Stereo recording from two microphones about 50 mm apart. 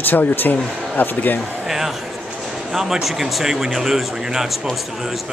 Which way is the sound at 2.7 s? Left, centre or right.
Centre.